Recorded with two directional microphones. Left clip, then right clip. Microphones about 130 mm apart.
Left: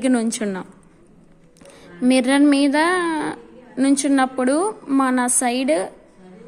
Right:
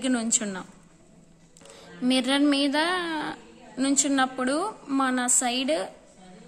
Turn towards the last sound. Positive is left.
turn(degrees=35)  # may be behind; listen again after turning